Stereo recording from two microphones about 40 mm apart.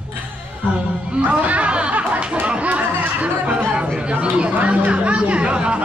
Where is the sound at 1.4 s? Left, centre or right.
Right.